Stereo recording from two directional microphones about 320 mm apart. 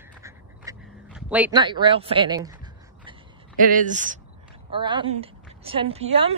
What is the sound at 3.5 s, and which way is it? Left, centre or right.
A woman's voice, right.